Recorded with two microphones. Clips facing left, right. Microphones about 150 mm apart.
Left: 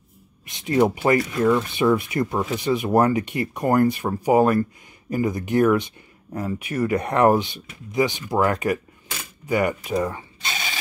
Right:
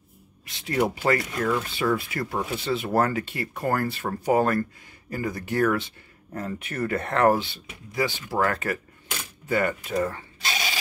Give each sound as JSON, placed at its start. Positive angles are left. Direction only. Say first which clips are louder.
{"t": 0.5, "sound": "speech", "louder": "left 6 dB", "side_deg": 20}